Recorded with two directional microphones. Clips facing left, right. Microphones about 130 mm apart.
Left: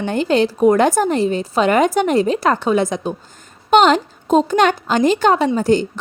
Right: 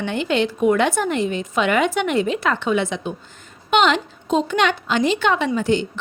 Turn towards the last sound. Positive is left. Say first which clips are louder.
# left 4 dB
turn(degrees=40)  # may be behind; listen again after turning